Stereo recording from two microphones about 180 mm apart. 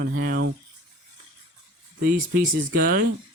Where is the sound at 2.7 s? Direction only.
55° right (ahead or behind).